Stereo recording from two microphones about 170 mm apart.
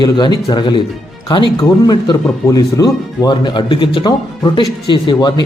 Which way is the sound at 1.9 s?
25° left (ahead or behind).